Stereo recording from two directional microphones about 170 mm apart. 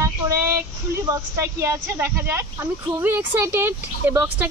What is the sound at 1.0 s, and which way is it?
Speech, 15° right (ahead or behind).